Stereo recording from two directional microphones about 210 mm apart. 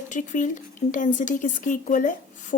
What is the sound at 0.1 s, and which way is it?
A woman's voice, 35° left (ahead or behind).